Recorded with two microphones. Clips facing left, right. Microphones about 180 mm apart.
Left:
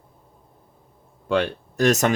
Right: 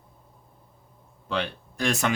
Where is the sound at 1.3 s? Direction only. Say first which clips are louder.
Left 8 dB; 45° left (ahead or behind).